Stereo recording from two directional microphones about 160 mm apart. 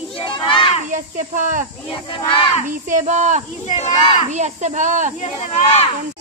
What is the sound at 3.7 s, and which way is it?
Speech, 45° left (ahead or behind).